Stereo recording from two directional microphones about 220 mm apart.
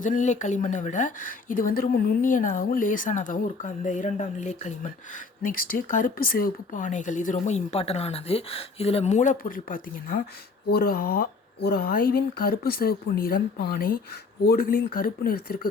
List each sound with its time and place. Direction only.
0.0 s speech: 35° left (ahead or behind)